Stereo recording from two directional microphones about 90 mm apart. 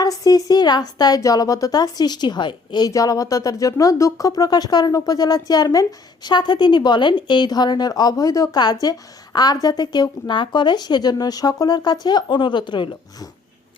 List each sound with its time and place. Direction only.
0.0 s speech: 45° left (ahead or behind)
2.9 s speech: 40° left (ahead or behind); by 12.9 s 55° left (ahead or behind)